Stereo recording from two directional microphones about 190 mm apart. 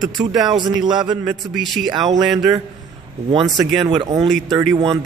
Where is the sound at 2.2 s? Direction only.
20° right (ahead or behind).